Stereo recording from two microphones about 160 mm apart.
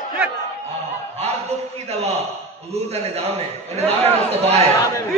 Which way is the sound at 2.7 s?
40° right (ahead or behind).